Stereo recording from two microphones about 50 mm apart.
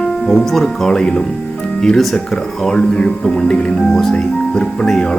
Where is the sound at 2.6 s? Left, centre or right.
Centre.